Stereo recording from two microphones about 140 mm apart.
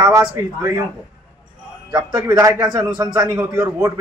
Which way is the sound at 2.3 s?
25° right (ahead or behind).